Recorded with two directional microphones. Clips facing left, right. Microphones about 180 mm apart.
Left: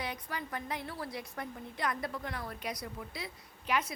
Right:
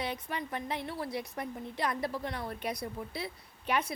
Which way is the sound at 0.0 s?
25° right (ahead or behind).